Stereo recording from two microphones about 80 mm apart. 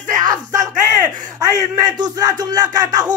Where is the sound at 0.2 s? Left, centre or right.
Right.